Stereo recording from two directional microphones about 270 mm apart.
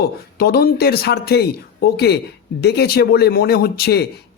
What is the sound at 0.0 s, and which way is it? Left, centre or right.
Speech, left.